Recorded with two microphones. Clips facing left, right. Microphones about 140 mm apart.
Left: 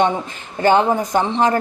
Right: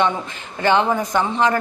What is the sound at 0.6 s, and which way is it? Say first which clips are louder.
Speech: left 3 dB; 40° left (ahead or behind).